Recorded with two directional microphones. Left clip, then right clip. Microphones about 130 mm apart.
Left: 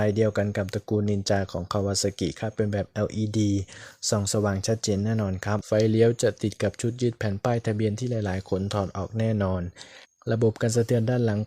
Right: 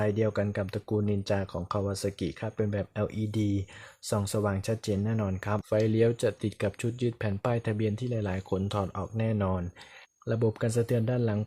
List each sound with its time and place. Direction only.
0.0 s speech: 40° left (ahead or behind)